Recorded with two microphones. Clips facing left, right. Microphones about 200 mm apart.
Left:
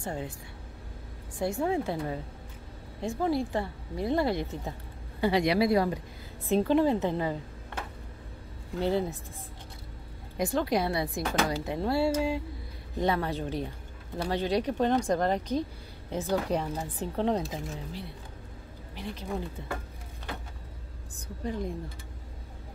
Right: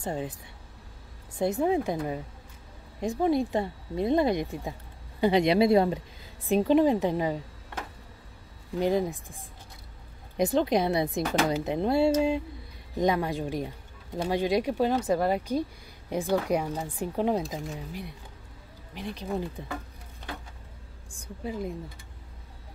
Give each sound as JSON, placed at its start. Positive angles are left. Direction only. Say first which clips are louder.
{"t": 0.0, "sound": "speech", "louder": "right 3 dB", "side_deg": -20}
{"t": 1.4, "sound": "speech", "louder": "right 3 dB", "side_deg": -20}
{"t": 8.7, "sound": "speech", "louder": "right 2 dB", "side_deg": -15}
{"t": 10.3, "sound": "speech", "louder": "right 3 dB", "side_deg": -20}
{"t": 21.1, "sound": "a woman's voice", "louder": "even", "side_deg": -10}